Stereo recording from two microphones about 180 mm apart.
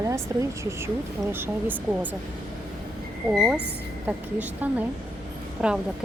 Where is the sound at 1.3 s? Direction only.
10° right (ahead or behind).